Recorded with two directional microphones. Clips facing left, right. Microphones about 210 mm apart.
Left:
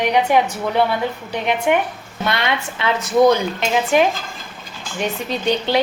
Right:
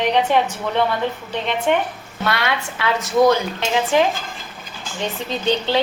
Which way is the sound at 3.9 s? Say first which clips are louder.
Left 2 dB; 15° left (ahead or behind).